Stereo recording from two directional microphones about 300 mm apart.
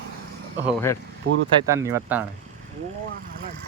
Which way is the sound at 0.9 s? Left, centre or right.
Centre.